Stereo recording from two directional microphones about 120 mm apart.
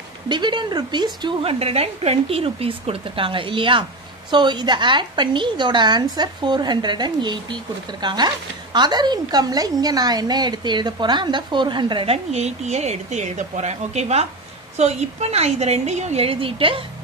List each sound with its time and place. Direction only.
0.3 s a woman's voice: 40° right (ahead or behind)
12.3 s a woman's voice: 65° right (ahead or behind)